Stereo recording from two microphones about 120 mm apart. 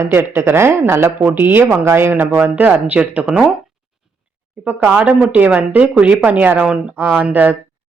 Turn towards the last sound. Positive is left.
turn(degrees=-15)  # may be behind; listen again after turning